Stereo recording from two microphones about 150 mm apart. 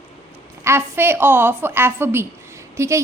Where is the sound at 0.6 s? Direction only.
15° right (ahead or behind).